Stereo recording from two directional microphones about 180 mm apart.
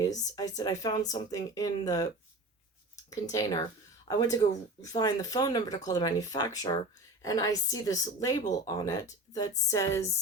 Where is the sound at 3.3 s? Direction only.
20° left (ahead or behind).